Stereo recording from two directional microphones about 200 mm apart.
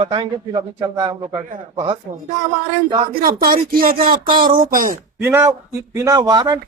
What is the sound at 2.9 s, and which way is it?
Speech, 25° right (ahead or behind).